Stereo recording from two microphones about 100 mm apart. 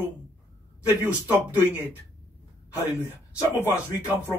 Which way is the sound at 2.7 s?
30° left (ahead or behind).